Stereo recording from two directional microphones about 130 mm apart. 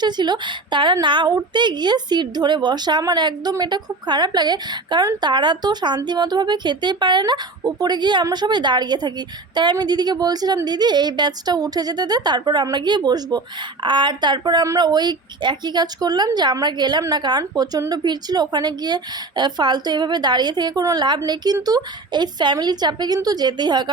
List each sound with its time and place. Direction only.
0.0 s a woman's voice: 35° right (ahead or behind)